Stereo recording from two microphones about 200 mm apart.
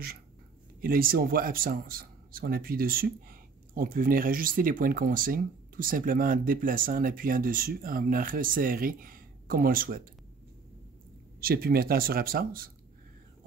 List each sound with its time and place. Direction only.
0.7 s speech: 45° right (ahead or behind)
11.4 s speech: 50° right (ahead or behind)